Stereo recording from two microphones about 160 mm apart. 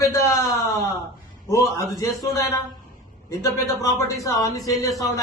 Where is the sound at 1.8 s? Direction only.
20° left (ahead or behind).